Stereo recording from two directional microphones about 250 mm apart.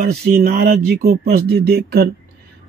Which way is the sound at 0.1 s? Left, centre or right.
Right.